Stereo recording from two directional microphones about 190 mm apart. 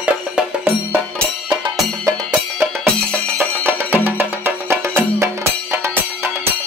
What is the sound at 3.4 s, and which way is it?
Music, 10° right (ahead or behind).